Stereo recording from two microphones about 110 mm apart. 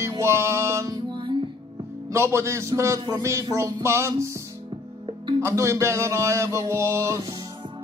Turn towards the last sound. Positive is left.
turn(degrees=-25)  # may be behind; listen again after turning